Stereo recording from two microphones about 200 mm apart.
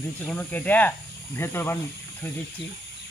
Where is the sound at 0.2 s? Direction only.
10° left (ahead or behind).